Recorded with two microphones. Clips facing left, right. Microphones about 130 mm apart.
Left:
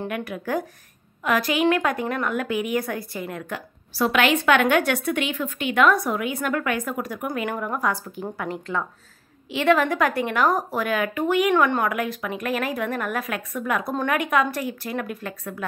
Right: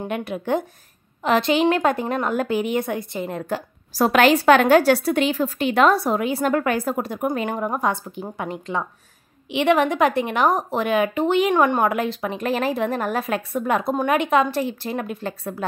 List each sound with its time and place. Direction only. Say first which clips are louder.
0.1 s a woman's voice: right 7 dB; 25° right (ahead or behind)